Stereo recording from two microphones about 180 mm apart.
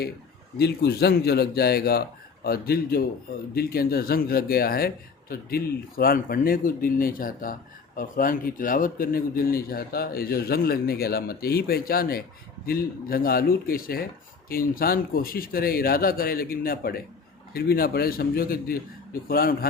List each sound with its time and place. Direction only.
0.6 s a man's voice: 65° left (ahead or behind)